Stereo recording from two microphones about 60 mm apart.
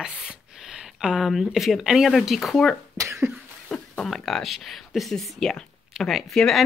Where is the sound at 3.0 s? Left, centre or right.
Right.